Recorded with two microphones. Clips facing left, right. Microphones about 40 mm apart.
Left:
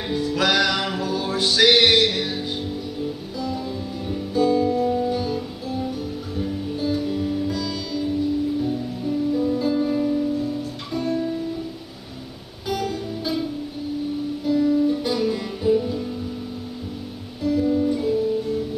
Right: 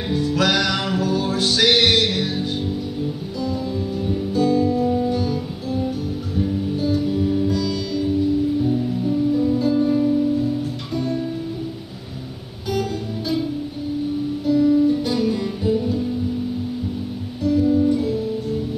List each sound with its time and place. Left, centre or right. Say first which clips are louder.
0.1 s music: right 1 dB; centre
4.0 s music: even; centre
12.6 s music: right 2 dB; centre
14.4 s music: right 3 dB; centre
17.4 s music: right 3 dB; centre